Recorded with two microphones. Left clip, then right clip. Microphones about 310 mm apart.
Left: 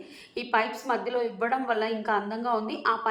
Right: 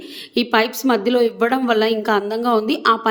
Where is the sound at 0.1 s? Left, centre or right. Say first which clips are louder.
Right 9 dB; right.